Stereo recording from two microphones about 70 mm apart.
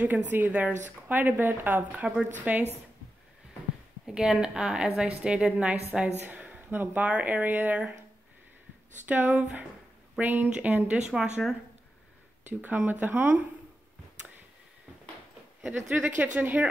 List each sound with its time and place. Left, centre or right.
0.0 s a woman's voice: right
4.0 s a woman's voice: centre; by 7.8 s right
9.0 s speech: right
11.1 s a woman's voice: centre
12.4 s speech: right
15.6 s a woman's voice: centre
16.2 s speech: right